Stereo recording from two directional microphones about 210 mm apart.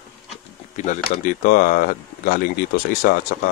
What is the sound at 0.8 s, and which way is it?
Speech, 35° left (ahead or behind).